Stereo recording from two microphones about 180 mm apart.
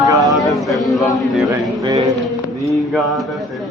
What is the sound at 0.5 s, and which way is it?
A man's voice, centre (ahead or behind).